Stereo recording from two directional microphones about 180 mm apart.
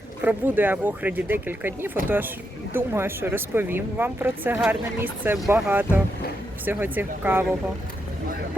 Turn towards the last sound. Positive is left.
turn(degrees=-10)  # may be behind; listen again after turning